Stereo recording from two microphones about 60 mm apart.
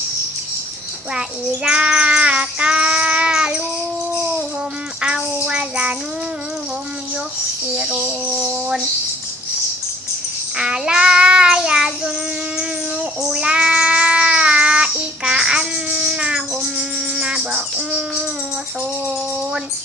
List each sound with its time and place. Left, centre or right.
1.6 s child singing: centre
5.0 s child singing: centre
7.8 s a sound: centre
10.6 s child singing: centre
13.3 s cat: centre